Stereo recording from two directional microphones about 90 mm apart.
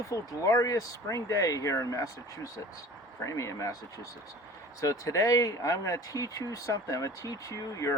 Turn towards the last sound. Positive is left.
turn(degrees=35)  # may be behind; listen again after turning